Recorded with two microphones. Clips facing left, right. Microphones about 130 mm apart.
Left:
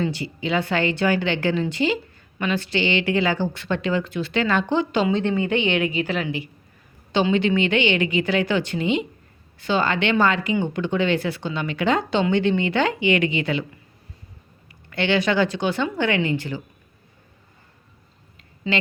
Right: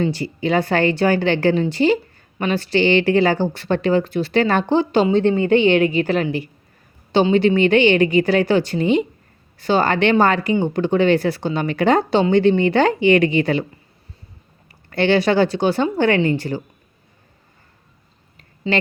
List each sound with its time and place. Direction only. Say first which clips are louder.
0.0 s speech: right 5 dB; 40° right (ahead or behind)
14.7 s speech: right 5 dB; 35° right (ahead or behind)